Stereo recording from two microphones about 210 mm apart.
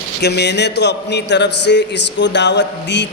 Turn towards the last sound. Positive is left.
turn(degrees=55)  # may be behind; listen again after turning